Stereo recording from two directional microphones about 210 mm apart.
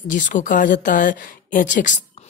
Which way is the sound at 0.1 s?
40° left (ahead or behind).